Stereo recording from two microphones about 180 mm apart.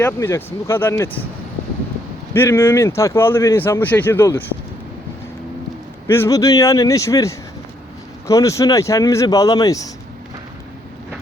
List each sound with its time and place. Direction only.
0.0 s speech: 15° left (ahead or behind)
2.3 s speech: 15° left (ahead or behind)
6.1 s speech: 15° left (ahead or behind)